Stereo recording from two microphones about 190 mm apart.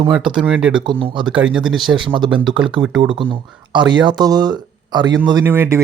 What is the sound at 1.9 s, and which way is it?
Speech, 25° right (ahead or behind).